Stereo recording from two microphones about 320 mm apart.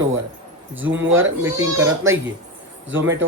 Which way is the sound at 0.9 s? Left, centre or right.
Right.